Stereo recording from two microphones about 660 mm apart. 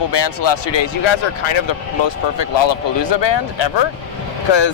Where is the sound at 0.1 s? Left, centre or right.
Left.